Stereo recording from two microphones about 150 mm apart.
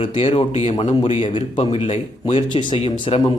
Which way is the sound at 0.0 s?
35° left (ahead or behind).